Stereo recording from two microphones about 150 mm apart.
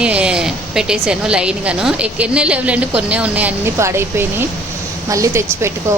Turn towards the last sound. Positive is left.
turn(degrees=-20)  # may be behind; listen again after turning